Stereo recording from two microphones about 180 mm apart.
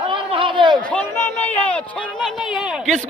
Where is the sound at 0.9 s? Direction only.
10° left (ahead or behind).